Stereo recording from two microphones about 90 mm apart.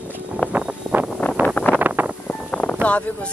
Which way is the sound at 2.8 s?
15° left (ahead or behind).